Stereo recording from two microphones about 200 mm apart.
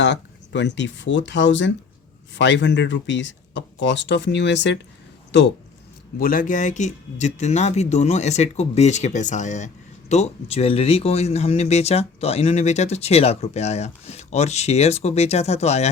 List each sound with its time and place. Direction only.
0.0 s speech: 60° left (ahead or behind)
6.1 s speech: 45° left (ahead or behind)